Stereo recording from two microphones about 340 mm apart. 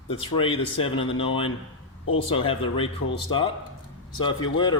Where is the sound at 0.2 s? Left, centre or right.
Centre.